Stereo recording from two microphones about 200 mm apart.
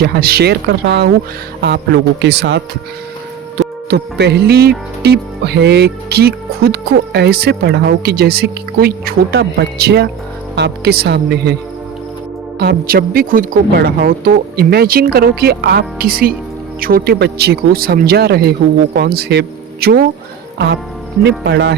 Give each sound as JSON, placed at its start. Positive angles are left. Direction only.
{"t": 0.0, "sound": "speech", "side_deg": -50}
{"t": 3.6, "sound": "speech", "side_deg": -55}
{"t": 12.5, "sound": "speech", "side_deg": -55}
{"t": 21.2, "sound": "speech", "side_deg": -55}